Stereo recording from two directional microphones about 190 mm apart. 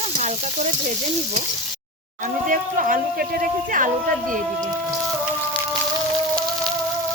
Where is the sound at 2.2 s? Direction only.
45° right (ahead or behind).